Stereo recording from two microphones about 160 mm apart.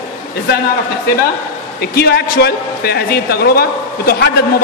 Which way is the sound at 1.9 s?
90° left.